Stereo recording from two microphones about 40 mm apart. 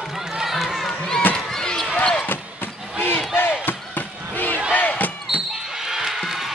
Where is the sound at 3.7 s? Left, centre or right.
Left.